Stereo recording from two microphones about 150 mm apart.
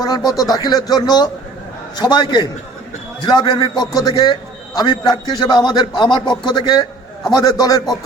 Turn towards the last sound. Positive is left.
turn(degrees=25)  # may be behind; listen again after turning